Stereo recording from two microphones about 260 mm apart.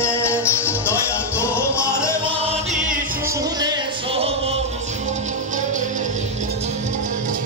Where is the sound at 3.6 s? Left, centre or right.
Centre.